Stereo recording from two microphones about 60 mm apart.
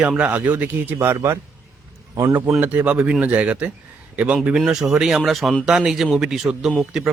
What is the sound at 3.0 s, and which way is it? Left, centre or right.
A man's voice, centre.